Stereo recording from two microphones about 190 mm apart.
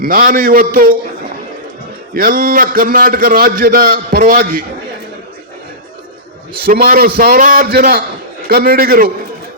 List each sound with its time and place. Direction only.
0.0 s a man's voice: 50° right (ahead or behind)
2.1 s a man's voice: 50° right (ahead or behind)
6.6 s a man's voice: 55° right (ahead or behind)